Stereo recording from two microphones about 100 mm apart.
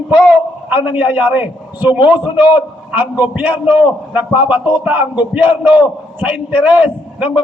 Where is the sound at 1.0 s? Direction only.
15° right (ahead or behind).